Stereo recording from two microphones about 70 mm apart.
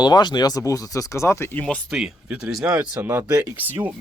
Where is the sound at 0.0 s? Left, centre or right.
Left.